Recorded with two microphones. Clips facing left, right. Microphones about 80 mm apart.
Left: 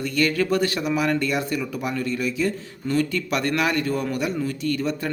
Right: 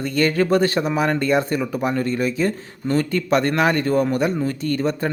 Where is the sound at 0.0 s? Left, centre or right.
Right.